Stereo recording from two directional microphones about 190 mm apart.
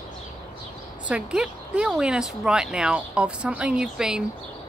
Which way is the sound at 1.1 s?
5° right (ahead or behind).